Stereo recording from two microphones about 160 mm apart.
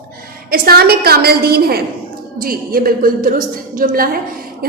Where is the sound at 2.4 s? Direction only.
65° right (ahead or behind).